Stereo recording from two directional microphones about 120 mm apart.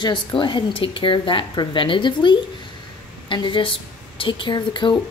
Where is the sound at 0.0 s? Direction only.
40° left (ahead or behind).